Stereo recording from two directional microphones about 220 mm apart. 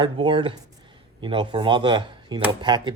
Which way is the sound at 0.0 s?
20° right (ahead or behind).